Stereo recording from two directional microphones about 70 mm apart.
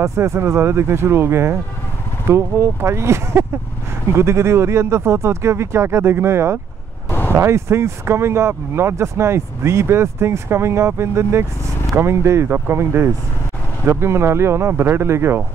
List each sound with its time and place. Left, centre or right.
0.0 s speech: right
7.1 s a sound: left
7.3 s speech: right